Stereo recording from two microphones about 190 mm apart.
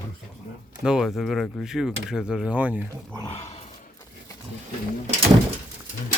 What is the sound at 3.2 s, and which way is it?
Roar, 30° left (ahead or behind).